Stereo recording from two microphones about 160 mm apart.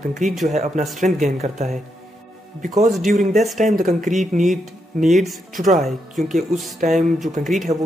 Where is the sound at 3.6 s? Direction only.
50° right (ahead or behind).